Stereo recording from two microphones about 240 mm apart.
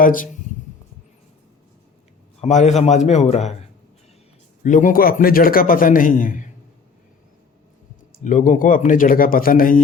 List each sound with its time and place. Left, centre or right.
0.0 s a man's voice: left
2.4 s a man's voice: left
4.6 s a man's voice: left
8.2 s a man's voice: left